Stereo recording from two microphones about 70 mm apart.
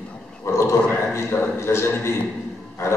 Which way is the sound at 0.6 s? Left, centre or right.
Left.